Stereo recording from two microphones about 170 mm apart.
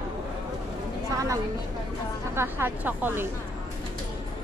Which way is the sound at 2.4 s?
15° right (ahead or behind).